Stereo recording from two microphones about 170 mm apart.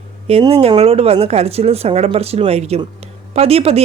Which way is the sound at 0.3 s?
35° right (ahead or behind).